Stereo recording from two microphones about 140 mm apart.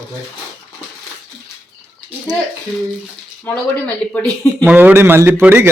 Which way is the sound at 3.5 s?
10° left (ahead or behind).